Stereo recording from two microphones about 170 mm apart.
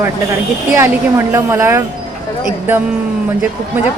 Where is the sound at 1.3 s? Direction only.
15° right (ahead or behind).